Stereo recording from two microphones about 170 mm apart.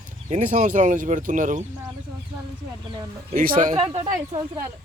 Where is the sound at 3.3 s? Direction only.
55° right (ahead or behind).